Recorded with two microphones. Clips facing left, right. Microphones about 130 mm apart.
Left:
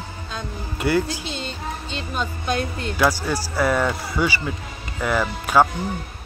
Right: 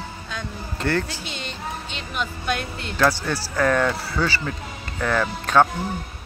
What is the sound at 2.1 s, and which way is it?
Speech, 35° left (ahead or behind).